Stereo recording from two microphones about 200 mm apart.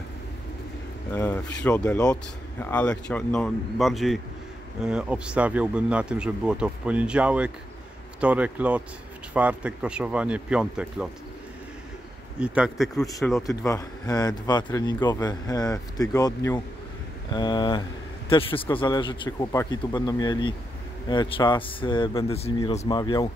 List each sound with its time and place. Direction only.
1.1 s speech: 10° left (ahead or behind)
12.4 s speech: 5° right (ahead or behind)
13.6 s a man's voice: 15° left (ahead or behind)